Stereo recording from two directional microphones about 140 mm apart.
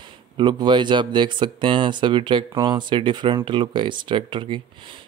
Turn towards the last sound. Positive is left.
turn(degrees=-35)  # may be behind; listen again after turning